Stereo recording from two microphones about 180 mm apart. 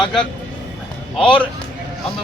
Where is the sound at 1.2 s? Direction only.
25° left (ahead or behind).